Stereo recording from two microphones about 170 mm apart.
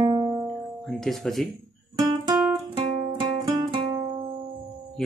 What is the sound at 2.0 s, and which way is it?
Guitar, 20° right (ahead or behind).